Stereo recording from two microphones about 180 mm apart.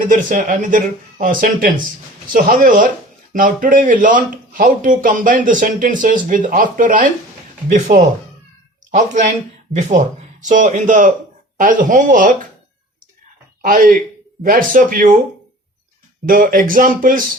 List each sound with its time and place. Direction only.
0.0 s speech: 50° right (ahead or behind)
13.6 s speech: 50° right (ahead or behind)
16.2 s speech: 50° right (ahead or behind)